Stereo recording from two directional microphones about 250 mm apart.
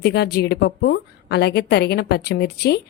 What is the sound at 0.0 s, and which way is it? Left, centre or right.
A woman's voice, left.